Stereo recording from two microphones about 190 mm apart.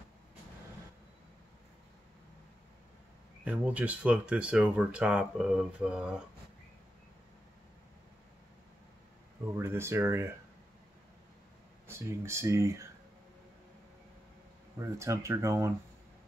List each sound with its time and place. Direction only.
3.4 s speech: 5° right (ahead or behind)
9.6 s speech: 15° right (ahead or behind)
11.9 s speech: 15° right (ahead or behind)
14.8 s speech: 15° right (ahead or behind)